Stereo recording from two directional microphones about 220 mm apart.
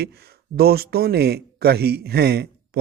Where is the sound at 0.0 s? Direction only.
45° right (ahead or behind).